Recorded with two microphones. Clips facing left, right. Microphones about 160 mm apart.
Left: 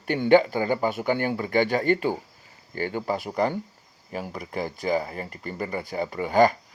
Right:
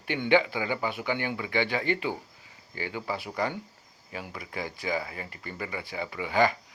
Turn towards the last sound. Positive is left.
turn(degrees=45)  # may be behind; listen again after turning